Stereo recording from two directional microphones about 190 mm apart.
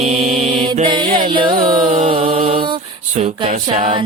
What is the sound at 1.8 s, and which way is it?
Mantra, 35° right (ahead or behind).